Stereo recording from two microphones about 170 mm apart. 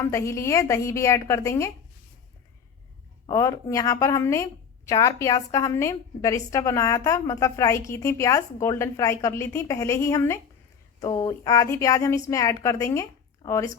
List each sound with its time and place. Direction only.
0.0 s a woman's voice: 15° left (ahead or behind)
3.2 s a woman's voice: 20° left (ahead or behind)